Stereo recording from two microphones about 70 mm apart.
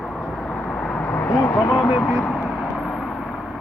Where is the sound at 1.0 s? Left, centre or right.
Left.